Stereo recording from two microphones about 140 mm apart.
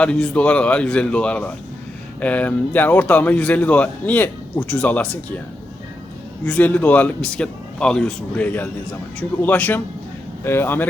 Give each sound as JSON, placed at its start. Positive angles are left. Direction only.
{"t": 0.0, "sound": "speech", "side_deg": 10}
{"t": 6.4, "sound": "speech", "side_deg": 10}